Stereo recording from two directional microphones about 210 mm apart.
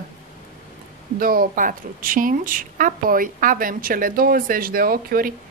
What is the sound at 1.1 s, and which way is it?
A woman's voice, 45° right (ahead or behind).